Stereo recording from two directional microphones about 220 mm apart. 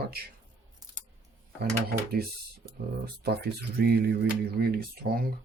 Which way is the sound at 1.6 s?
45° right (ahead or behind).